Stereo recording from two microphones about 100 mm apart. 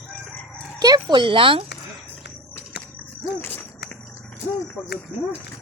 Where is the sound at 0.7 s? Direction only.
40° right (ahead or behind); by 1.6 s 60° right (ahead or behind).